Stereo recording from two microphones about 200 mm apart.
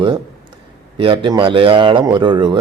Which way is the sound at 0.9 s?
25° right (ahead or behind).